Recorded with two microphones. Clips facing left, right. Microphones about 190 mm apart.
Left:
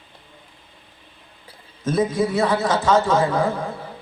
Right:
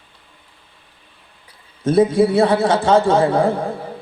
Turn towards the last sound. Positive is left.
turn(degrees=-30)  # may be behind; listen again after turning